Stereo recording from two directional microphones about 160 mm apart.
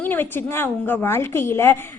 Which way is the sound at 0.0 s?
15° left (ahead or behind).